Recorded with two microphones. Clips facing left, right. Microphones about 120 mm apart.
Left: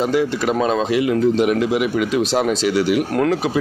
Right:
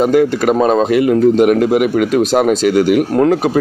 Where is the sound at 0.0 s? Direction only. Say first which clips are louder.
Right 7 dB; 55° right (ahead or behind).